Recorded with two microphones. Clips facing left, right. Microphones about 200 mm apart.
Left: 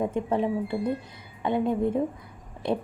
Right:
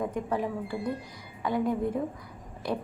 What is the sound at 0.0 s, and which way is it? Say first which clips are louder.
A woman's voice: left 4 dB; 25° left (ahead or behind).